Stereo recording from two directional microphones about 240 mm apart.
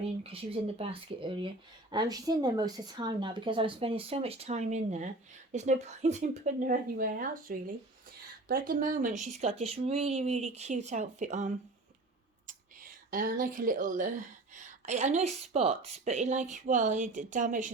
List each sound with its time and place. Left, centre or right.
0.2 s a woman's voice: right
13.1 s a woman's voice: right